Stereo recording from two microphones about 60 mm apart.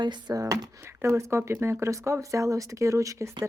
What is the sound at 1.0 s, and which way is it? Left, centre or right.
A woman's voice, right.